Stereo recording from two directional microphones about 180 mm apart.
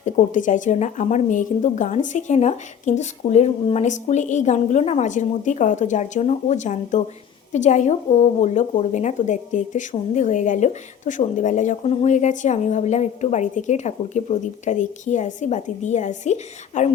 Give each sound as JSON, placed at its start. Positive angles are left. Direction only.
{"t": 0.0, "sound": "a woman's voice", "side_deg": 45}